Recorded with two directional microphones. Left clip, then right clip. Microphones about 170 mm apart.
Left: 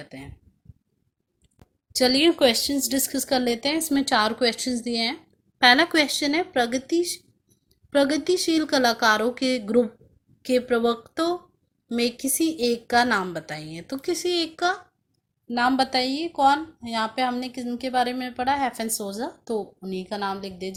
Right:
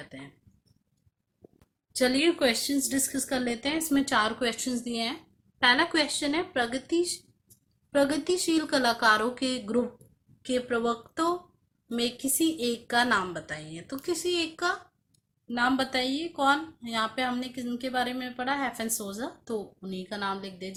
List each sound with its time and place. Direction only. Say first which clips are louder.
1.5 s a woman's voice: left 5 dB; 30° left (ahead or behind)